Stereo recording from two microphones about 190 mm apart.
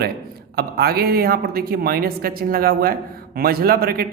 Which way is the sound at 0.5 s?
55° right (ahead or behind).